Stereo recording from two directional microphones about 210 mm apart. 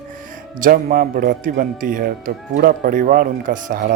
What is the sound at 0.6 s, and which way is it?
Speech, 40° right (ahead or behind).